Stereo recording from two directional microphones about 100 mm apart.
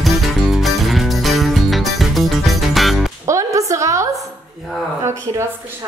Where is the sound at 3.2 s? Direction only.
30° right (ahead or behind).